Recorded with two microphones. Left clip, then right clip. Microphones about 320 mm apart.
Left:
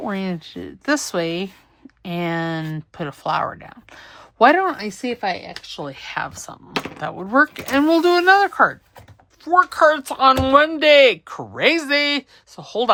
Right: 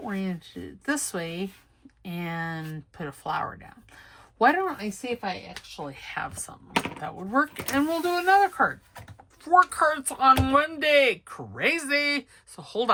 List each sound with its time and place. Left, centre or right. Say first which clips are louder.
0.1 s speech: left 7 dB; centre
5.2 s speech: left 9 dB; left
5.9 s speech: left 7 dB; centre
9.4 s speech: left 5 dB; centre